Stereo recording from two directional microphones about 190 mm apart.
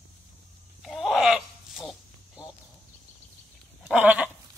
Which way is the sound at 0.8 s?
Centre (ahead or behind).